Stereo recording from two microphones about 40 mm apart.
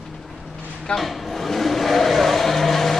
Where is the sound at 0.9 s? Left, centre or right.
Centre.